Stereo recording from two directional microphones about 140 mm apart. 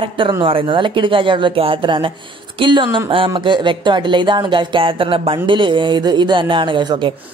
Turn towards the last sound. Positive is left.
turn(degrees=-35)  # may be behind; listen again after turning